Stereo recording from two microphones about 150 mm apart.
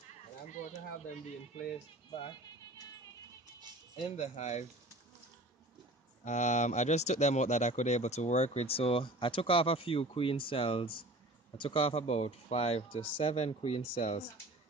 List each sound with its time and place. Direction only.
0.5 s speech: 55° left (ahead or behind)
2.0 s speech: 35° left (ahead or behind)
4.0 s speech: 50° left (ahead or behind)
6.2 s speech: 50° left (ahead or behind)